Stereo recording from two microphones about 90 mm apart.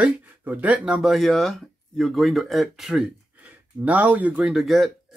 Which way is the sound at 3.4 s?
15° right (ahead or behind).